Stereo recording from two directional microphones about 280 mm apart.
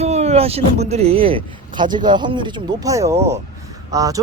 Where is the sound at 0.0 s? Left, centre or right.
Right.